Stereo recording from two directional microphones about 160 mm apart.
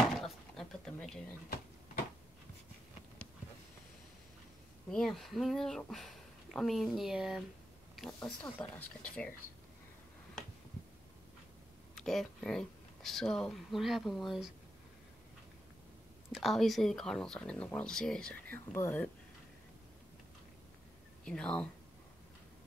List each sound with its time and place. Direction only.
0.2 s a sound: 5° left (ahead or behind)
4.9 s speech: centre (ahead or behind)
8.4 s speech: 10° left (ahead or behind)
11.9 s speech: centre (ahead or behind)
16.3 s speech: centre (ahead or behind)
21.2 s speech: 5° left (ahead or behind)